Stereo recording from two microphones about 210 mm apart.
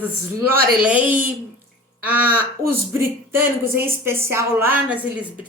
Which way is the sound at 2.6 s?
15° right (ahead or behind).